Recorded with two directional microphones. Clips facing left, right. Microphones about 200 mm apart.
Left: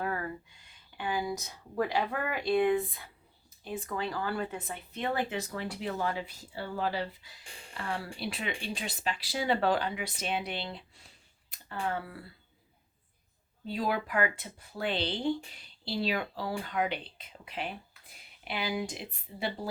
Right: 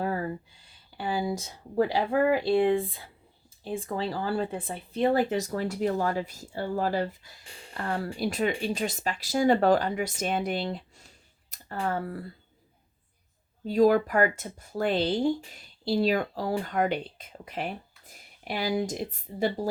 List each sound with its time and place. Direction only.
0.0 s speech: 30° right (ahead or behind)
13.7 s speech: 45° right (ahead or behind)